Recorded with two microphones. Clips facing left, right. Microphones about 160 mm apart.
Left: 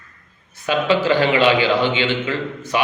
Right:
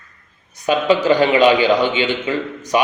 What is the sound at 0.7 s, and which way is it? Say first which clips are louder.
A man's voice: right 2 dB; 15° right (ahead or behind).